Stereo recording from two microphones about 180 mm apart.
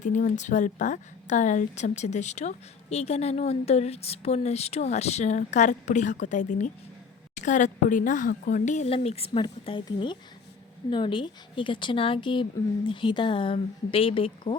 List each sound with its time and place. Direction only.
0.0 s speech: 45° left (ahead or behind)